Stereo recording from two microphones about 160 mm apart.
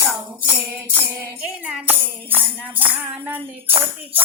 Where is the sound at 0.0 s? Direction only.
10° right (ahead or behind).